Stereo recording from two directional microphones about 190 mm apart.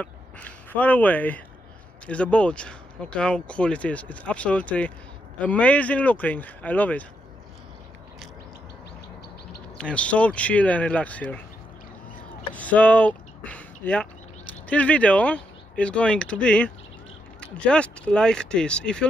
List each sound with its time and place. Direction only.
0.0 s speech: 10° left (ahead or behind)
9.8 s speech: 5° left (ahead or behind)
12.5 s speech: 10° left (ahead or behind)